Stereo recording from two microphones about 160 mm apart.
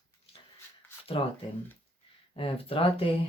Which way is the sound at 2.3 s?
35° left (ahead or behind).